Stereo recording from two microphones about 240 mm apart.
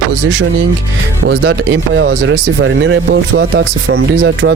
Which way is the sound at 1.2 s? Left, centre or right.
Right.